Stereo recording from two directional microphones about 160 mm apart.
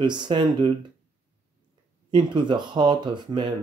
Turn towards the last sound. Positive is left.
turn(degrees=-30)  # may be behind; listen again after turning